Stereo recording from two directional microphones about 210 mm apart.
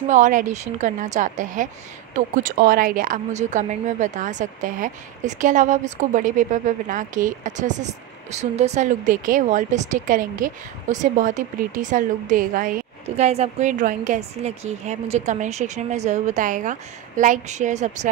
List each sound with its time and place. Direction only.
0.1 s a woman's voice: 35° right (ahead or behind)